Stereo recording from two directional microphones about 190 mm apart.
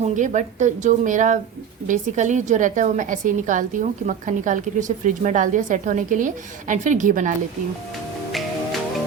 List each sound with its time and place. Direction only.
0.0 s a woman's voice: 40° right (ahead or behind)